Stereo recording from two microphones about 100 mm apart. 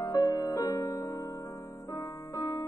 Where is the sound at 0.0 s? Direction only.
35° left (ahead or behind).